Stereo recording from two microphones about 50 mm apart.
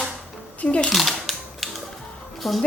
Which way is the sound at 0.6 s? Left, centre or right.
Left.